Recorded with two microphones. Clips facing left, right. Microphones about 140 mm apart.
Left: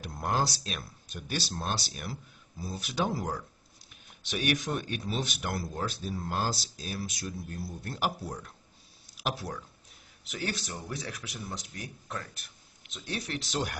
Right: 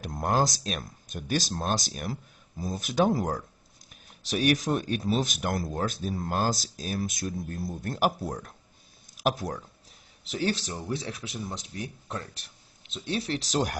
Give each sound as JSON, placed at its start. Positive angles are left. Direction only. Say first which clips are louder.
{"t": 0.0, "sound": "speech", "louder": "right 4 dB", "side_deg": -45}
{"t": 10.2, "sound": "speech", "louder": "right 7 dB", "side_deg": -30}